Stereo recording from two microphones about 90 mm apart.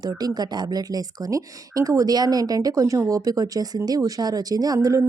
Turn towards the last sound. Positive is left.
turn(degrees=-40)  # may be behind; listen again after turning